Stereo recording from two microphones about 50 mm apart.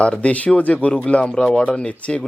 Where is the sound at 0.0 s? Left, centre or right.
Left.